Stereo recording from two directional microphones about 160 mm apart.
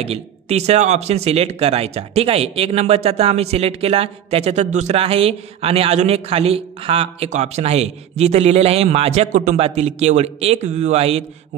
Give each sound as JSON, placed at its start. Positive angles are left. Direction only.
{"t": 0.0, "sound": "speech", "side_deg": -40}